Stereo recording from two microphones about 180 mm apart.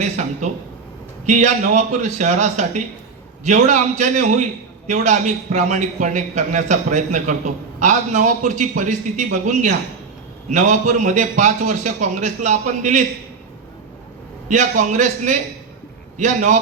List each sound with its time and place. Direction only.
1.3 s a man's voice: 40° right (ahead or behind)
14.4 s a man's voice: 45° right (ahead or behind)